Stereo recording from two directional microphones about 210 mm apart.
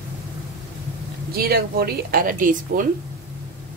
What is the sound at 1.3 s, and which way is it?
Speech, 45° right (ahead or behind).